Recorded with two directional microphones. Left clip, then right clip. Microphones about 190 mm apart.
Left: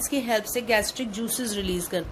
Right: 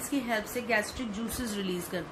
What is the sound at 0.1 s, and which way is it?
A woman's voice, 50° left (ahead or behind).